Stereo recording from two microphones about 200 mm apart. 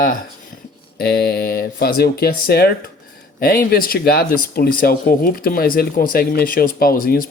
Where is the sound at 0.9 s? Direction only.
50° left (ahead or behind).